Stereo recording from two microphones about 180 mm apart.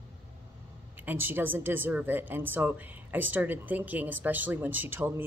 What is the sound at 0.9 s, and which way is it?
Speech, 10° right (ahead or behind).